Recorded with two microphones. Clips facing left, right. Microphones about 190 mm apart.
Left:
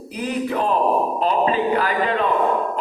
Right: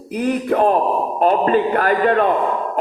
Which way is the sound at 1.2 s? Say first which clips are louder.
Right 8 dB; 55° right (ahead or behind).